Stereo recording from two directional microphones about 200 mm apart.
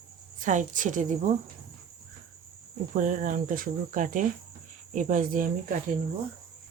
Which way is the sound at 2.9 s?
40° right (ahead or behind).